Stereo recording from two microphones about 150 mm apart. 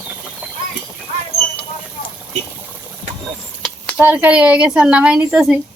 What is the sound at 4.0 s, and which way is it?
Speech, 10° right (ahead or behind).